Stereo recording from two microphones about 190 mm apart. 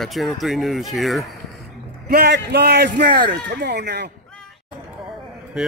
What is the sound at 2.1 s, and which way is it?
Speech, 55° right (ahead or behind).